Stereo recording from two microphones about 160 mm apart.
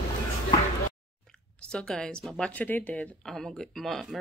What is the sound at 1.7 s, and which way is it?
Speech, 5° left (ahead or behind).